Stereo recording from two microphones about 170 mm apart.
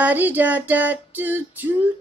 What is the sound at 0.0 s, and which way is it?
A woman's voice, 10° right (ahead or behind).